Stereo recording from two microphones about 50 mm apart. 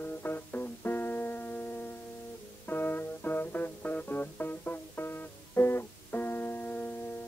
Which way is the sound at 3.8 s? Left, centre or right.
Left.